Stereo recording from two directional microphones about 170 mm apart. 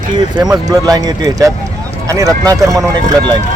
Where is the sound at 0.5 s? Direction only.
20° right (ahead or behind).